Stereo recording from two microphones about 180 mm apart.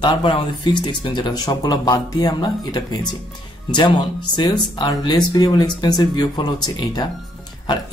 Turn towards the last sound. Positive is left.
turn(degrees=25)  # may be behind; listen again after turning